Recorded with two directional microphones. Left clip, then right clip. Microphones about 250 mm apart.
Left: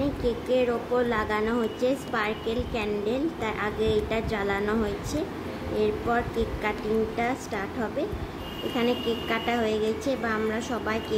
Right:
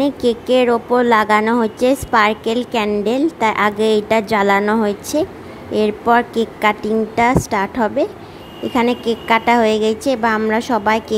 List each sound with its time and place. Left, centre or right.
0.0 s speech: right